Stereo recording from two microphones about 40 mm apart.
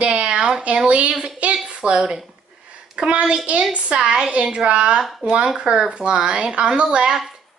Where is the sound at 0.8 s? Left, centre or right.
Right.